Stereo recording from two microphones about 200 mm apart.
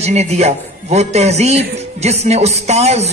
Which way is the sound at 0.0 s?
35° right (ahead or behind).